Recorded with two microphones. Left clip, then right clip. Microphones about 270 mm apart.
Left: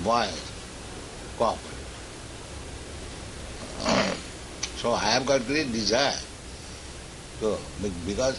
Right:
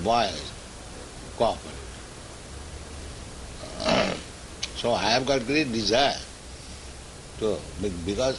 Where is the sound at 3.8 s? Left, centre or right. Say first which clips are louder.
Right 1 dB; right.